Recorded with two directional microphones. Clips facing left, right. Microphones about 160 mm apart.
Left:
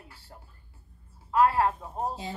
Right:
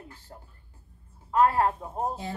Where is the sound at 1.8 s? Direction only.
Centre (ahead or behind).